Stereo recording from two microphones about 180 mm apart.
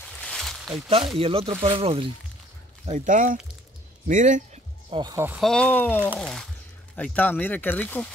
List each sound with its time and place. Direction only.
0.0 s a sound: 5° left (ahead or behind)
0.8 s speech: 30° right (ahead or behind)
2.9 s speech: 45° right (ahead or behind)
4.8 s speech: 25° right (ahead or behind)
5.4 s speech: 5° left (ahead or behind)